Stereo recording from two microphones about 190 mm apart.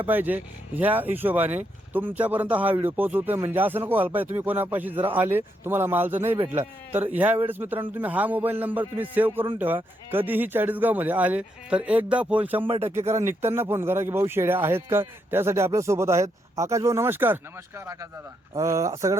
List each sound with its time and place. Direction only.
0.0 s a man's voice: 10° right (ahead or behind)
12.6 s speech: 30° right (ahead or behind)
13.1 s a man's voice: 15° right (ahead or behind)